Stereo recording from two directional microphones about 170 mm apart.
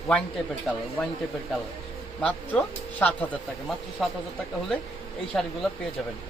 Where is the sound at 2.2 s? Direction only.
5° left (ahead or behind).